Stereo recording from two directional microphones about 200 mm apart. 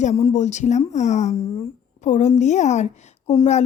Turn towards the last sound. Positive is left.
turn(degrees=35)  # may be behind; listen again after turning